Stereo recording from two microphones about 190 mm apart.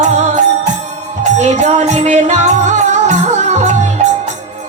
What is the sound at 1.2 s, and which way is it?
Music, 35° right (ahead or behind).